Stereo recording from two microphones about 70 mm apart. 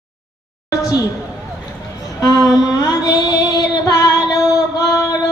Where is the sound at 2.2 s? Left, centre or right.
Left.